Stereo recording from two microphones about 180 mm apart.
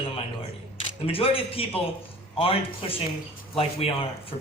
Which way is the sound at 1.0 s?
30° left (ahead or behind).